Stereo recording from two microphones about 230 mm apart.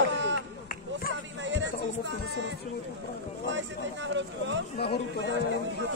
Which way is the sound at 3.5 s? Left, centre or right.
Right.